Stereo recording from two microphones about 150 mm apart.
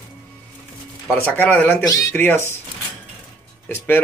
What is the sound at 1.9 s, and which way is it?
Speech, 25° left (ahead or behind).